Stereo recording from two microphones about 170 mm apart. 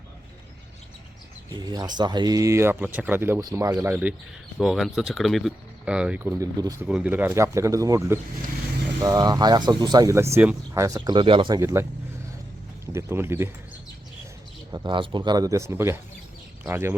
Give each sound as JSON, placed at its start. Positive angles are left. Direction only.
{"t": 1.5, "sound": "speech", "side_deg": -25}
{"t": 4.5, "sound": "speech", "side_deg": 0}
{"t": 6.8, "sound": "speech", "side_deg": -10}
{"t": 11.6, "sound": "speech", "side_deg": -15}
{"t": 14.7, "sound": "speech", "side_deg": -25}